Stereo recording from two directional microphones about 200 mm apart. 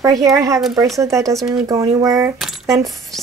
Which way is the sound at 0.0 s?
15° right (ahead or behind).